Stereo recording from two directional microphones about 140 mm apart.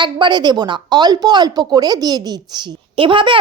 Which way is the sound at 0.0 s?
30° right (ahead or behind).